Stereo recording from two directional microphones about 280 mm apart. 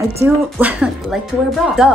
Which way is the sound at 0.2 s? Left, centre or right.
Centre.